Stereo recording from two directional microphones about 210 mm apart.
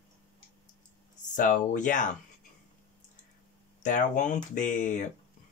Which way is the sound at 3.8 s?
40° left (ahead or behind).